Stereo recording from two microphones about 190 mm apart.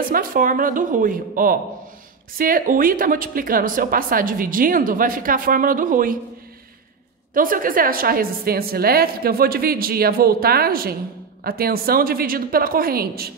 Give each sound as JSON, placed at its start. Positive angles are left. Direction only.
{"t": 0.0, "sound": "speech", "side_deg": -50}
{"t": 7.3, "sound": "speech", "side_deg": -45}